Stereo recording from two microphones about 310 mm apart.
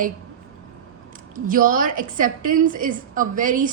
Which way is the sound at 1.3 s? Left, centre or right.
Right.